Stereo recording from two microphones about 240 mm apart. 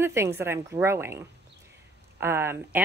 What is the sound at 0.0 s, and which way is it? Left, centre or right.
A woman's voice, centre.